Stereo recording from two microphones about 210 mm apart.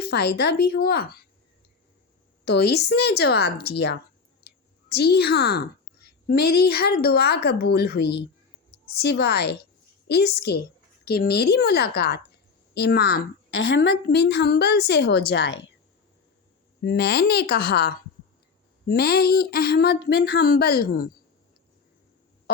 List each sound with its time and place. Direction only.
0.0 s speech: 50° left (ahead or behind)
2.4 s a woman's voice: 50° left (ahead or behind)
13.5 s a woman's voice: 70° left (ahead or behind)
13.8 s speech: 50° left (ahead or behind)
16.8 s speech: 50° left (ahead or behind)
22.5 s music: 45° left (ahead or behind)